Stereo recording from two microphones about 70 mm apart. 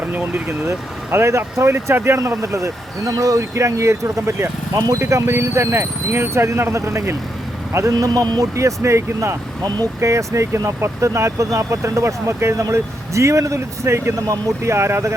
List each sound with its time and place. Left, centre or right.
0.0 s a man's voice: right
7.9 s a man's voice: right
8.5 s speech: right